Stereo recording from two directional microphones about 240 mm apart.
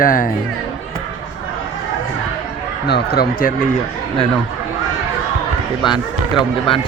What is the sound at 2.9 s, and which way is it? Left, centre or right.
Speech, left.